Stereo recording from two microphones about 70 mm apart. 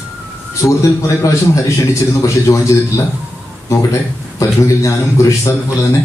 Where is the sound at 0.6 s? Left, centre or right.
Left.